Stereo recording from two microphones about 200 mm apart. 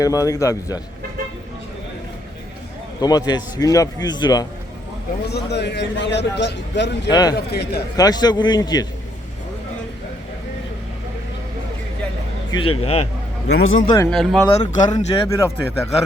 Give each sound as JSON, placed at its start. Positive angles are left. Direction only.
{"t": 0.0, "sound": "speech", "side_deg": 15}
{"t": 3.0, "sound": "a man's voice", "side_deg": 20}
{"t": 5.3, "sound": "a man's voice", "side_deg": 55}
{"t": 7.1, "sound": "a man's voice", "side_deg": 20}
{"t": 7.3, "sound": "a man's voice", "side_deg": 55}
{"t": 7.9, "sound": "a man's voice", "side_deg": 20}
{"t": 12.5, "sound": "a man's voice", "side_deg": 25}
{"t": 13.5, "sound": "a man's voice", "side_deg": 90}
{"t": 13.8, "sound": "speech", "side_deg": 15}
{"t": 14.1, "sound": "speech", "side_deg": 5}
{"t": 14.5, "sound": "speech", "side_deg": 20}